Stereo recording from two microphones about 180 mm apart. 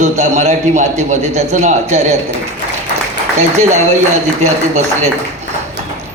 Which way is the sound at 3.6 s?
40° right (ahead or behind).